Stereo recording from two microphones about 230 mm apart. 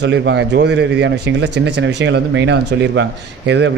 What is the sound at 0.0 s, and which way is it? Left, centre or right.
Speech, right.